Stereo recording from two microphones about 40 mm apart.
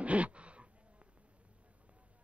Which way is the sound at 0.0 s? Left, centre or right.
Right.